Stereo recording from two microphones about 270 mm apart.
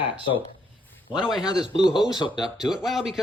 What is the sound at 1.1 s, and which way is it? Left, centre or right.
A man's voice, centre.